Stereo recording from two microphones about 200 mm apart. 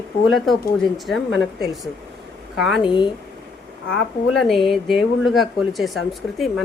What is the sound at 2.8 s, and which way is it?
Speech, 25° left (ahead or behind).